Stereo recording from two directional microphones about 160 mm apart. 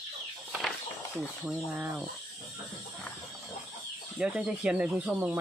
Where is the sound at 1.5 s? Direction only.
5° right (ahead or behind).